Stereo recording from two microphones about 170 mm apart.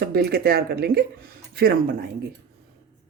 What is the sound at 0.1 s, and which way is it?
Speech, 65° right (ahead or behind).